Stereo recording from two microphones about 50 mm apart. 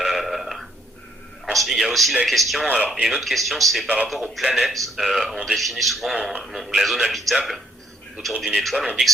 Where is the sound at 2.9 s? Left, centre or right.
Centre.